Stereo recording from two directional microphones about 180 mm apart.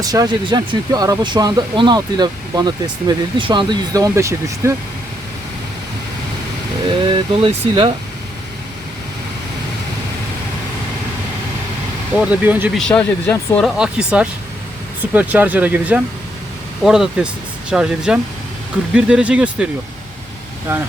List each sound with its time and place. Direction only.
0.0 s speech: 20° right (ahead or behind)
7.0 s speech: 30° right (ahead or behind)
12.2 s speech: 10° right (ahead or behind)
12.9 s speech: 10° left (ahead or behind)
13.7 s speech: 5° right (ahead or behind)